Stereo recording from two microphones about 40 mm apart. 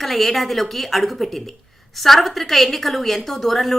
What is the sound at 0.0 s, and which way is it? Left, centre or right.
A woman's voice, centre.